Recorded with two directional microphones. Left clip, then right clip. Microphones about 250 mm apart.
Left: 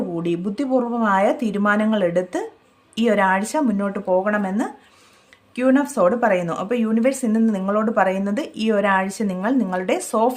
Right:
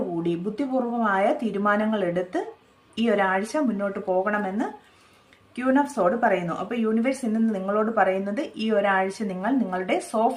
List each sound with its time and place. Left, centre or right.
0.2 s a woman's voice: left